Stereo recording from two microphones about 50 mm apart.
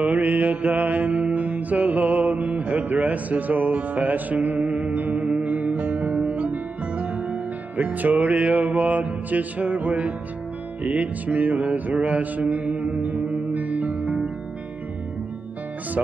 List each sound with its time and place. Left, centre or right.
0.0 s mantra: right
10.8 s music: right